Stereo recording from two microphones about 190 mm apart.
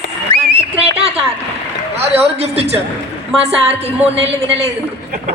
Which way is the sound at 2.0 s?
35° right (ahead or behind).